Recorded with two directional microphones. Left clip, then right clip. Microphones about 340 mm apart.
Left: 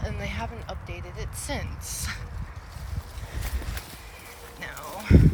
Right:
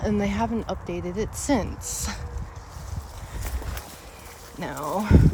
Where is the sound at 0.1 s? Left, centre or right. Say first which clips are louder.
Right 9 dB; right.